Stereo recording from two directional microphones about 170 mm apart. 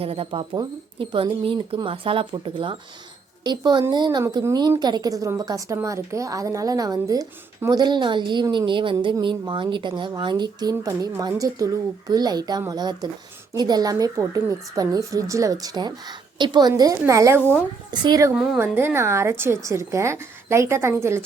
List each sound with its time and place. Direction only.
0.0 s a woman's voice: 35° right (ahead or behind)
18.3 s speech: 10° right (ahead or behind)